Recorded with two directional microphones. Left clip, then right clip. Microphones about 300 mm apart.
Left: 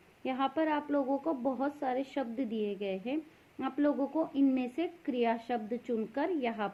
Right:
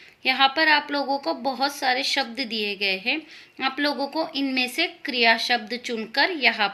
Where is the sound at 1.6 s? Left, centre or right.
Centre.